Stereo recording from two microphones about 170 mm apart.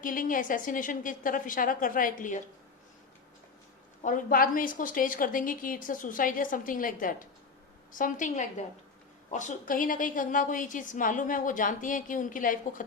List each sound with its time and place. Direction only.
0.0 s a woman's voice: 55° left (ahead or behind)
4.0 s a woman's voice: 55° left (ahead or behind)